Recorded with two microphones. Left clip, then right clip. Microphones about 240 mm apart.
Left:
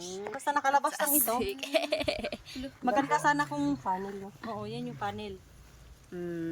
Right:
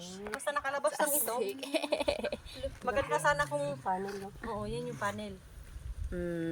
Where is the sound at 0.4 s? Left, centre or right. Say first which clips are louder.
Left 6 dB; left.